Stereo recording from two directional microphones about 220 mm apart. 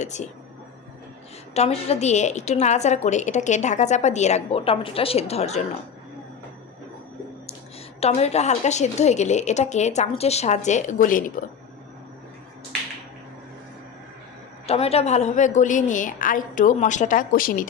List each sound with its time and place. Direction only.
0.0 s a woman's voice: 30° left (ahead or behind)
1.5 s a woman's voice: 30° left (ahead or behind)
8.0 s a woman's voice: 30° left (ahead or behind)
14.7 s a woman's voice: 25° left (ahead or behind)